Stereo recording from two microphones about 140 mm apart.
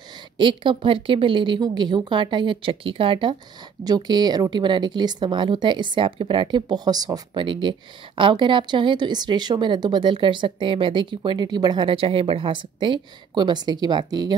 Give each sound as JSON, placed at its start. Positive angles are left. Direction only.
{"t": 0.4, "sound": "speech", "side_deg": -35}